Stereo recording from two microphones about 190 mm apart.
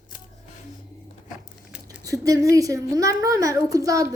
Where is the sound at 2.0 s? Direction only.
20° right (ahead or behind).